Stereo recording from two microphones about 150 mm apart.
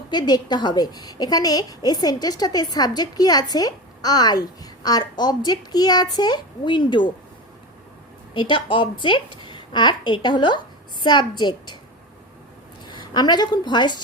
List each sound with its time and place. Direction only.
0.1 s a woman's voice: 30° left (ahead or behind)
8.3 s a woman's voice: 35° left (ahead or behind)
12.9 s a woman's voice: 30° left (ahead or behind)